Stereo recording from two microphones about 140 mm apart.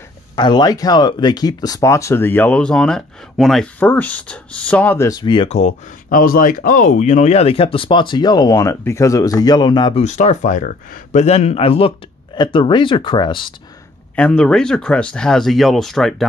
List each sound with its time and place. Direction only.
0.4 s speech: 30° left (ahead or behind)
5.2 s speech: 35° left (ahead or behind)
5.5 s speech: 55° left (ahead or behind)
6.0 s speech: 90° left; by 9.9 s 30° left (ahead or behind)
9.9 s speech: 55° left (ahead or behind); by 13.5 s 35° left (ahead or behind)
14.1 s speech: 5° left (ahead or behind)